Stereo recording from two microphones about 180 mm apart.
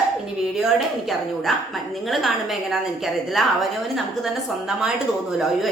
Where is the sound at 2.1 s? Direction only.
Centre (ahead or behind).